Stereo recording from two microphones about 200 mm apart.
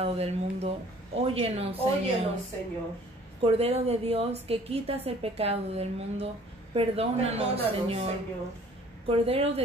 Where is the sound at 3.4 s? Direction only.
30° right (ahead or behind).